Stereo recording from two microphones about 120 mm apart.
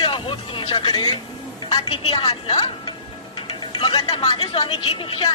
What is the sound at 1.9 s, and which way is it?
Speech, 55° left (ahead or behind).